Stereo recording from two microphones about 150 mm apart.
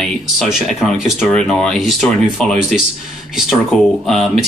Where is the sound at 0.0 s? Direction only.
Centre (ahead or behind).